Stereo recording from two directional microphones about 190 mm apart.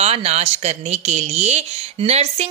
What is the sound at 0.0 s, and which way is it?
A woman's voice, 35° right (ahead or behind).